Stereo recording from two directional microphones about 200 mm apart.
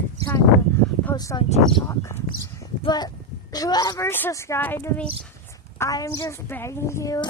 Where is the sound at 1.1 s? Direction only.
20° left (ahead or behind).